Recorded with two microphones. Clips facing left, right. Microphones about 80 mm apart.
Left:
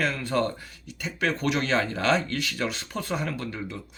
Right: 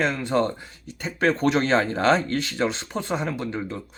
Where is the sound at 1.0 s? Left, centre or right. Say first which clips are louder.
Right 5 dB; right.